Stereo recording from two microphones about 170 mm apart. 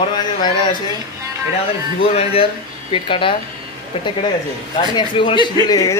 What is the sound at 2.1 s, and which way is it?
Speech, 35° left (ahead or behind).